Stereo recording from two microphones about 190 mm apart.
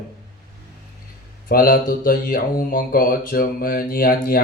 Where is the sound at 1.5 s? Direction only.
50° left (ahead or behind).